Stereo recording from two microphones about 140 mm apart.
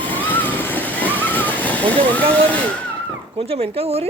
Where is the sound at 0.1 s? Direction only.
15° left (ahead or behind).